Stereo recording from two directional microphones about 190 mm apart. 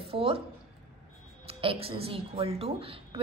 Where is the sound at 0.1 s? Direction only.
30° right (ahead or behind).